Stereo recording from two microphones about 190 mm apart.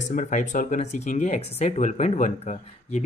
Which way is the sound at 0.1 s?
40° left (ahead or behind).